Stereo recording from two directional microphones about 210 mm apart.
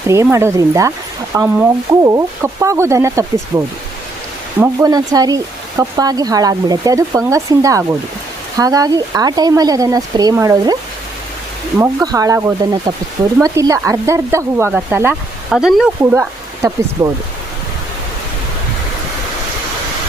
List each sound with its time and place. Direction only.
0.1 s speech: 15° right (ahead or behind)
11.8 s speech: 15° right (ahead or behind)